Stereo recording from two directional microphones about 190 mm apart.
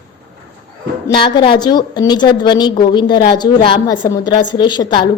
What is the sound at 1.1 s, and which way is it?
A woman's voice, 25° left (ahead or behind).